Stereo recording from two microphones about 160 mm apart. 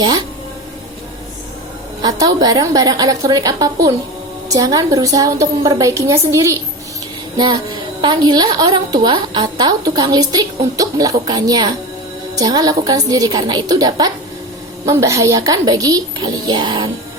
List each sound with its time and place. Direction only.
2.0 s a child's voice: 25° right (ahead or behind)